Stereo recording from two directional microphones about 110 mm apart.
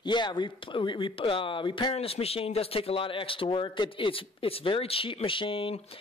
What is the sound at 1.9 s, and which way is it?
Speech, 65° left (ahead or behind).